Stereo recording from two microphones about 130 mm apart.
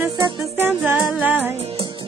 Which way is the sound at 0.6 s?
15° right (ahead or behind).